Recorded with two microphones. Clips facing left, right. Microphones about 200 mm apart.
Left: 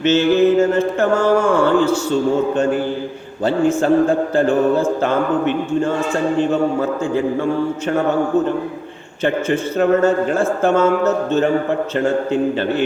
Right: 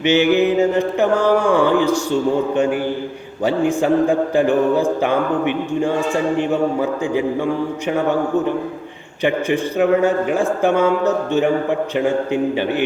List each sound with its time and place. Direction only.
0.0 s mantra: 15° right (ahead or behind)
9.2 s mantra: 15° right (ahead or behind)